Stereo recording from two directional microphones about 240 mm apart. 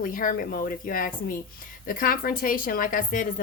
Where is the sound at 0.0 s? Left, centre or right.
Left.